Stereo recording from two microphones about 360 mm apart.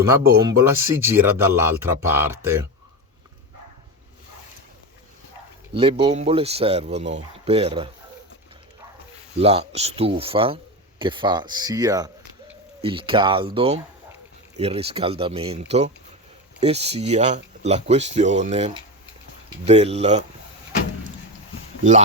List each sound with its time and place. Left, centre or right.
0.4 s speech: centre
5.7 s speech: centre
9.4 s speech: centre